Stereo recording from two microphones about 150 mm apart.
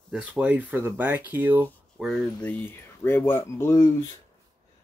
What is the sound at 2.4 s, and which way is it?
Speech, 10° left (ahead or behind).